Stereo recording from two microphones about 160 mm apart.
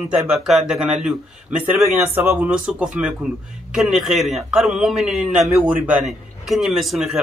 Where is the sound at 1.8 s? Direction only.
15° right (ahead or behind).